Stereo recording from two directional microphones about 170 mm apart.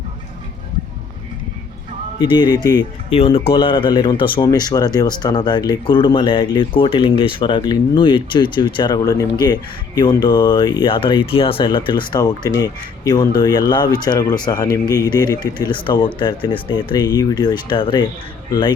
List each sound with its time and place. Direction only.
2.1 s speech: 25° left (ahead or behind)
3.1 s speech: 35° left (ahead or behind)